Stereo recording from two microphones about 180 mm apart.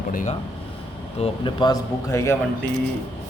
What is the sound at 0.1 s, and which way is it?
Speech, 45° left (ahead or behind).